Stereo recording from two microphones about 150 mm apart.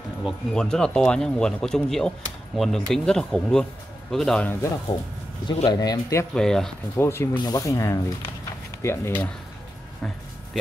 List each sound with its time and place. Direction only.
0.2 s speech: 5° left (ahead or behind)
5.7 s speech: 25° left (ahead or behind)
6.3 s speech: 5° left (ahead or behind)
7.0 s speech: 15° left (ahead or behind)